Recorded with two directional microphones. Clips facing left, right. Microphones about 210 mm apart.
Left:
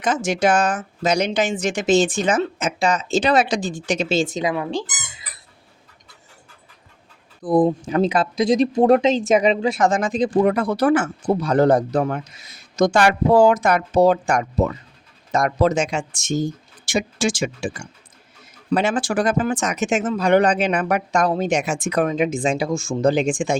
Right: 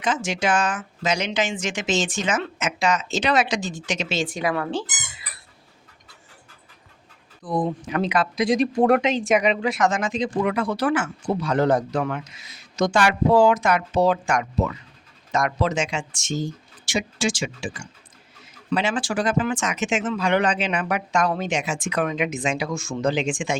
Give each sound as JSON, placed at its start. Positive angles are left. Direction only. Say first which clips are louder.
{"t": 0.0, "sound": "speech", "louder": "left 5 dB", "side_deg": 45}
{"t": 7.4, "sound": "speech", "louder": "left 8 dB", "side_deg": 30}
{"t": 12.7, "sound": "speech", "louder": "left 4 dB", "side_deg": 50}